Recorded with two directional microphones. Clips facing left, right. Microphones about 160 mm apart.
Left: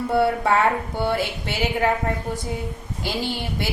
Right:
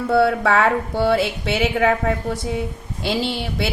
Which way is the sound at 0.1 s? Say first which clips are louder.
Right 3 dB; 85° right.